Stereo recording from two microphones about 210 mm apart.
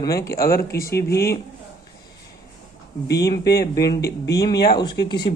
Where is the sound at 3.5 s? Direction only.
50° left (ahead or behind).